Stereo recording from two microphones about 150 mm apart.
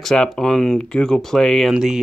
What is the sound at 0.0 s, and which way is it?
Speech, 5° left (ahead or behind).